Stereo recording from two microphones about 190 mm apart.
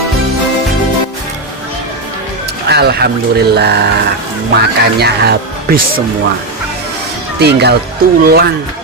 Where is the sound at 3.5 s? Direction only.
60° right (ahead or behind).